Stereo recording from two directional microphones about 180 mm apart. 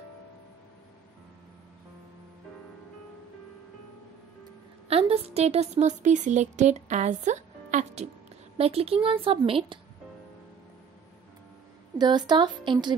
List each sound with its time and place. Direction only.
4.8 s speech: 35° right (ahead or behind)
12.3 s speech: 25° right (ahead or behind)